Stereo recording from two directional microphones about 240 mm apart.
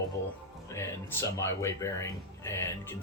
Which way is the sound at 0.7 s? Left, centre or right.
Centre.